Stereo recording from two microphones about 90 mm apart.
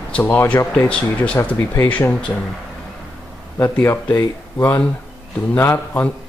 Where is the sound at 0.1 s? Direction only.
20° left (ahead or behind).